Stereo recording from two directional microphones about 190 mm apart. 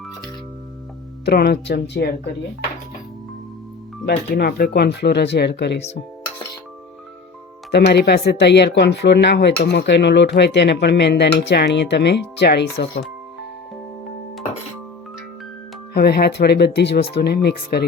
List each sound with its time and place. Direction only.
1.2 s speech: 60° left (ahead or behind)
4.0 s speech: 60° left (ahead or behind)
7.7 s speech: 60° left (ahead or behind)
16.0 s speech: 55° left (ahead or behind)